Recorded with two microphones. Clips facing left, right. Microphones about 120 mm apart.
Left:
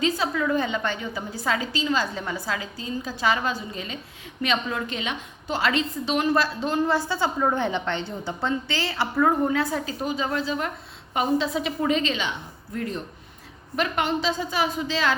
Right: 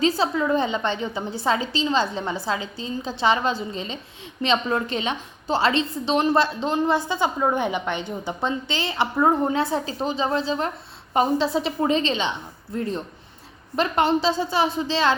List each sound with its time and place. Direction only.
0.0 s a woman's voice: 30° right (ahead or behind)